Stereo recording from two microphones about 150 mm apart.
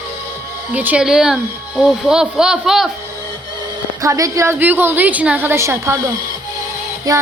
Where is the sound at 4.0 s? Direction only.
20° right (ahead or behind).